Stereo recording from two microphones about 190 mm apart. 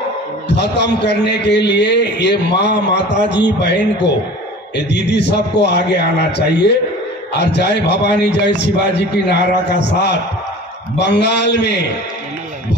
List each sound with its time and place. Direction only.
0.5 s a man's voice: 65° left (ahead or behind)